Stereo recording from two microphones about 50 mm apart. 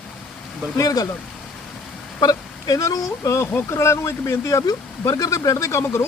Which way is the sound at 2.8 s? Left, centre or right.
Left.